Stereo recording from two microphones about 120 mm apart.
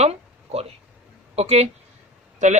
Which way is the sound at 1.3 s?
60° right (ahead or behind).